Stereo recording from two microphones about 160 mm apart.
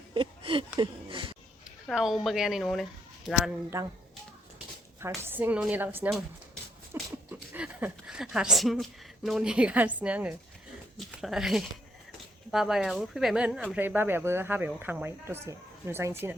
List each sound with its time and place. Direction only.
0.1 s a sound: 35° right (ahead or behind)
1.9 s speech: centre (ahead or behind)
3.7 s speech: 20° right (ahead or behind)
4.9 s speech: 15° right (ahead or behind)
6.9 s goat: 15° right (ahead or behind)
7.5 s a woman's voice: 10° right (ahead or behind)